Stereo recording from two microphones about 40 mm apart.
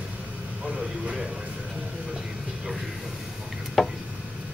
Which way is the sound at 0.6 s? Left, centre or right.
Centre.